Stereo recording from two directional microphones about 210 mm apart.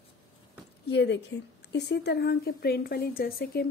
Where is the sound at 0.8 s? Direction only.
55° left (ahead or behind).